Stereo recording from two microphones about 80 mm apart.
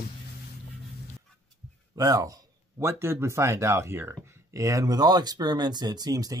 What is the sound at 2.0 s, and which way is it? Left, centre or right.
Speech, right.